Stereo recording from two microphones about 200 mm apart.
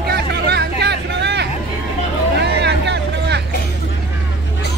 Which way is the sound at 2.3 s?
55° right (ahead or behind).